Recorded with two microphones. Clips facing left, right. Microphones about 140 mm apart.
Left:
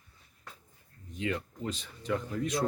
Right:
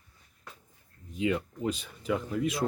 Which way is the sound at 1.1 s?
10° right (ahead or behind).